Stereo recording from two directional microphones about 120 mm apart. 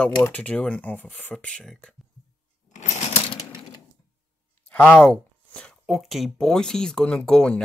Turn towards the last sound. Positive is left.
turn(degrees=5)  # may be behind; listen again after turning